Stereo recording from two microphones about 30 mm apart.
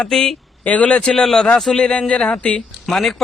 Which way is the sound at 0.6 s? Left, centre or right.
Left.